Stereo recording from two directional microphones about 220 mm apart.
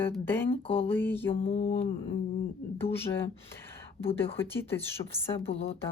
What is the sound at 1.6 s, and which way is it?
Speech, 25° left (ahead or behind).